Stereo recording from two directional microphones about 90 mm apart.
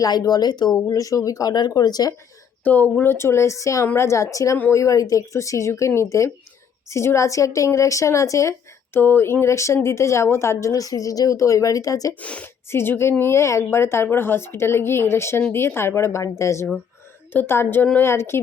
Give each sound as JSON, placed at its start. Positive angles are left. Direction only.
{"t": 0.0, "sound": "speech", "side_deg": 45}
{"t": 2.6, "sound": "a woman's voice", "side_deg": 20}
{"t": 12.2, "sound": "a woman's voice", "side_deg": 15}
{"t": 12.6, "sound": "a woman's voice", "side_deg": 25}